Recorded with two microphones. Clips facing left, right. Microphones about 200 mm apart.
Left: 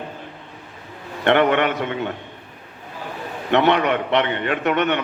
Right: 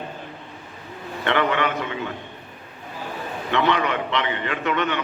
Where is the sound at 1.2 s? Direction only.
60° left (ahead or behind).